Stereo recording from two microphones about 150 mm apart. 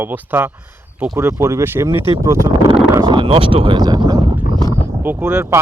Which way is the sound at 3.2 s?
35° right (ahead or behind).